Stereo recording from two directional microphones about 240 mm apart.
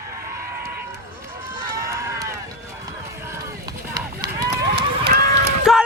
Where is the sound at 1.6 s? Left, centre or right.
Centre.